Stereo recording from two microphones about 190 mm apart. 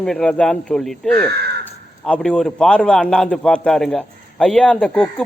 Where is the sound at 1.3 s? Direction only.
55° right (ahead or behind).